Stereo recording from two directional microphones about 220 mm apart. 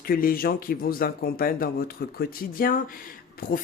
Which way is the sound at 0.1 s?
40° left (ahead or behind).